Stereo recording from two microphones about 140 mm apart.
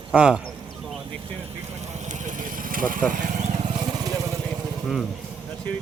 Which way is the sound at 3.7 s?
30° right (ahead or behind).